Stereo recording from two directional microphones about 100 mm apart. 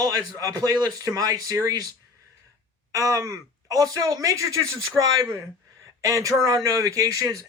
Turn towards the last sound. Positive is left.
turn(degrees=-35)  # may be behind; listen again after turning